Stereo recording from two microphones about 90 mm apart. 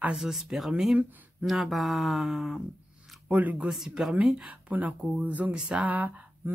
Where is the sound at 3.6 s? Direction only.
5° right (ahead or behind).